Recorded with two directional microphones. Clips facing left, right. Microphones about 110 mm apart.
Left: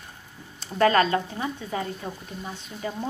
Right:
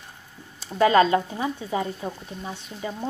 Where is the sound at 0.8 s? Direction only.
20° right (ahead or behind).